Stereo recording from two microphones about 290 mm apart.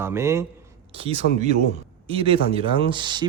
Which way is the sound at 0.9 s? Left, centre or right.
Centre.